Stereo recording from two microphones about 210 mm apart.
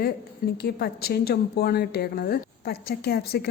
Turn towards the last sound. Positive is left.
turn(degrees=50)  # may be behind; listen again after turning